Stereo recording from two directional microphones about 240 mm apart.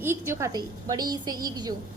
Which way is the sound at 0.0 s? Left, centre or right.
Centre.